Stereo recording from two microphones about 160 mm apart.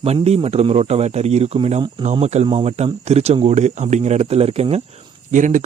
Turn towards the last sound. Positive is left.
turn(degrees=-55)  # may be behind; listen again after turning